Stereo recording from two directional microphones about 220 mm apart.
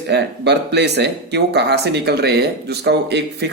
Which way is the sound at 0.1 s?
50° right (ahead or behind).